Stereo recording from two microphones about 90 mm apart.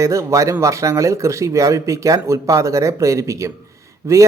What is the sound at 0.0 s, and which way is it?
Speech, 35° right (ahead or behind).